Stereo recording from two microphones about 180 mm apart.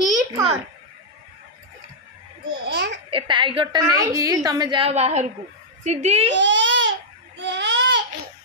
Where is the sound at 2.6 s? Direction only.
70° right (ahead or behind).